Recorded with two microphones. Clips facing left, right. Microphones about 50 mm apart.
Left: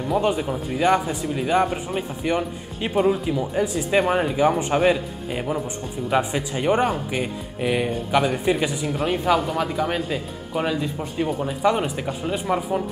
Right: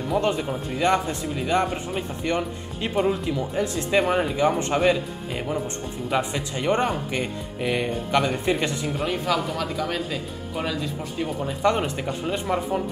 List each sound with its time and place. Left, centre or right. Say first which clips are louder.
0.1 s speech: left 2 dB; centre
11.2 s speech: left 1 dB; centre